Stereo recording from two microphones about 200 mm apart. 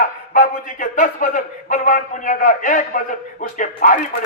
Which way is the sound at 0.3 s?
45° left (ahead or behind).